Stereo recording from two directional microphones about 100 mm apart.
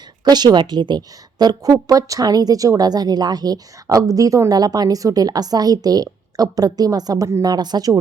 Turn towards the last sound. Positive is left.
turn(degrees=-40)  # may be behind; listen again after turning